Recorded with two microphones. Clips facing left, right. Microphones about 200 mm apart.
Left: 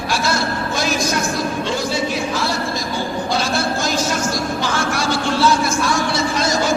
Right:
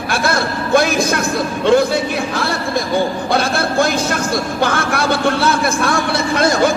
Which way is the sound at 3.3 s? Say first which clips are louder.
Right 3 dB; 55° right (ahead or behind).